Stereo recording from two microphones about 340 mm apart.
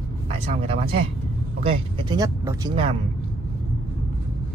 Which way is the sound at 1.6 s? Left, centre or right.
Centre.